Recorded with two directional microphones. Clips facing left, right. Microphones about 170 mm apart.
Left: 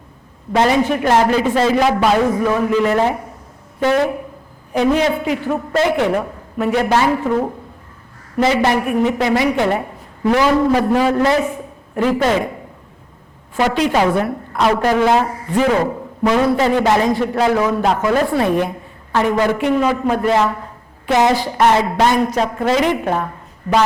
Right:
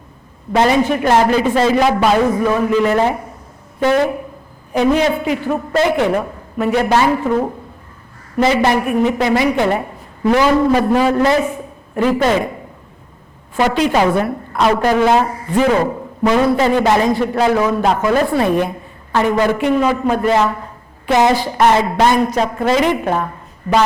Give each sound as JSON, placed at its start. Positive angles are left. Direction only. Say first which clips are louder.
{"t": 0.5, "sound": "a woman's voice", "louder": "right 1 dB", "side_deg": -15}
{"t": 8.4, "sound": "a woman's voice", "louder": "right 1 dB", "side_deg": -15}
{"t": 13.6, "sound": "a woman's voice", "louder": "right 1 dB", "side_deg": -15}